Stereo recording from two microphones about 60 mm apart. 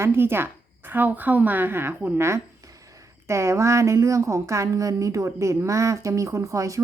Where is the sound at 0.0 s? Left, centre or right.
Right.